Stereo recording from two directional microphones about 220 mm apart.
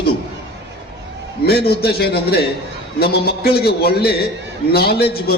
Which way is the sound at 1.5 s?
45° left (ahead or behind).